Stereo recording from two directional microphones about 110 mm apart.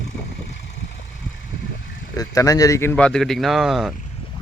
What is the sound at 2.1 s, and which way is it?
Speech, 30° left (ahead or behind).